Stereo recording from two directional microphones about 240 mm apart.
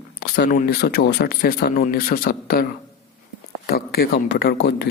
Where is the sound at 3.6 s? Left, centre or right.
Left.